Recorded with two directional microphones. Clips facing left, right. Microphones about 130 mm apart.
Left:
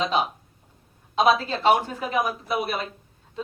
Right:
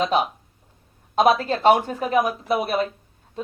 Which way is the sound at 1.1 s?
50° right (ahead or behind).